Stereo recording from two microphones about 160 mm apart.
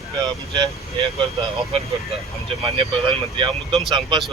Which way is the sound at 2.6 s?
35° right (ahead or behind).